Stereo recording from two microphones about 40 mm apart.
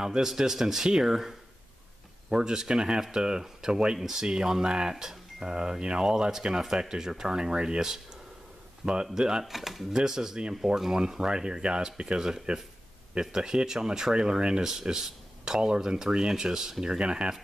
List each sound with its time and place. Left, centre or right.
0.0 s speech: centre
2.3 s speech: centre
9.9 s speech: centre
12.2 s speech: centre